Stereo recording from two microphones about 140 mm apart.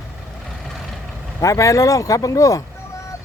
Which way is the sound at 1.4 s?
25° left (ahead or behind).